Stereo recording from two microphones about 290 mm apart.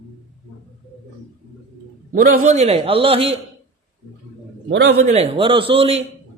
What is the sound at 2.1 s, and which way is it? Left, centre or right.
A man's voice, right.